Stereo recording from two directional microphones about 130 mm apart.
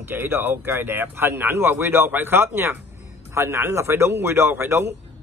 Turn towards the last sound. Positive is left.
turn(degrees=-20)  # may be behind; listen again after turning